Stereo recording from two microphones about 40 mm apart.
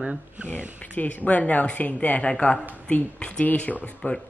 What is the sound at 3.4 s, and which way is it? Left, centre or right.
Speech, left.